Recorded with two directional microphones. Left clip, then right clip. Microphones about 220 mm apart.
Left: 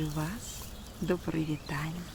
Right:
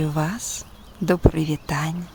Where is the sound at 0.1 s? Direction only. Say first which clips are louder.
Right 12 dB; 50° right (ahead or behind).